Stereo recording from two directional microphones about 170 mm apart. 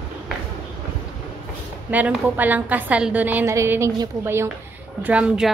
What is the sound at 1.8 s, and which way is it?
A woman's voice, 10° right (ahead or behind).